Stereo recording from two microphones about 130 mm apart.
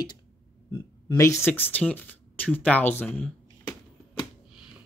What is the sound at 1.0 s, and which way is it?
Speech, 25° left (ahead or behind).